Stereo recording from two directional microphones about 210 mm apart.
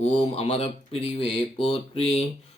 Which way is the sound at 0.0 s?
30° left (ahead or behind).